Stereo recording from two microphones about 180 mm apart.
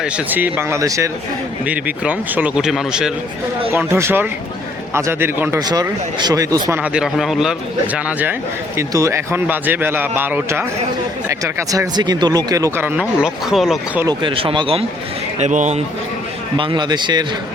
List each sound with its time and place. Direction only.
0.0 s speech: 10° right (ahead or behind)
3.7 s speech: 15° right (ahead or behind)
6.8 s speech: 5° right (ahead or behind)
14.0 s speech: 25° right (ahead or behind)
15.4 s a man's voice: 40° right (ahead or behind)
16.6 s speech: 25° right (ahead or behind)